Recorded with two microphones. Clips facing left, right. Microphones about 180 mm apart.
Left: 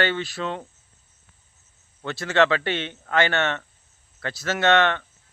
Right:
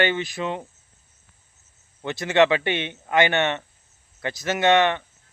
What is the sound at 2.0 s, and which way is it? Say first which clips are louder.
Speech: right 2 dB; 15° right (ahead or behind).